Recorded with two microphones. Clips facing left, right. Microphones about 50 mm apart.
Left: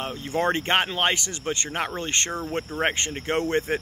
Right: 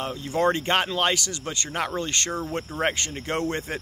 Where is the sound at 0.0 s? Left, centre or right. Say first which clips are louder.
Right 2 dB; left.